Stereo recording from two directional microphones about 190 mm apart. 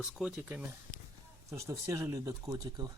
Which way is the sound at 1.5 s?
15° right (ahead or behind).